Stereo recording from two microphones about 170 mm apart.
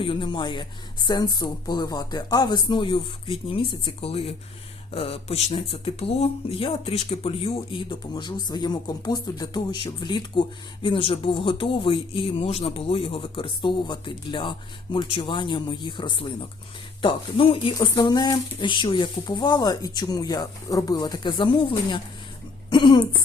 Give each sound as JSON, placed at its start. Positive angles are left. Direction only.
{"t": 0.0, "sound": "speech", "side_deg": 30}